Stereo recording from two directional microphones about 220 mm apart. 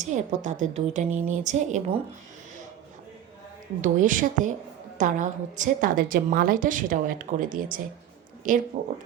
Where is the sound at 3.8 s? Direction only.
35° right (ahead or behind).